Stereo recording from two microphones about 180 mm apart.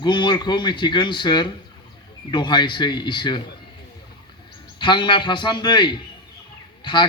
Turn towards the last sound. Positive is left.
turn(degrees=25)  # may be behind; listen again after turning